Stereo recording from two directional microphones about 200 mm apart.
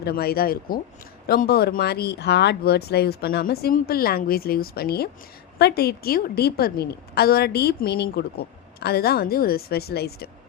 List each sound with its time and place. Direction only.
0.0 s a woman's voice: 50° left (ahead or behind)